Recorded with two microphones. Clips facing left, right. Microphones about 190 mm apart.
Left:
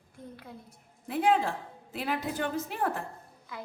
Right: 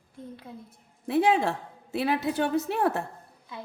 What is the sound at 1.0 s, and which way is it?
A woman's voice, 75° right (ahead or behind).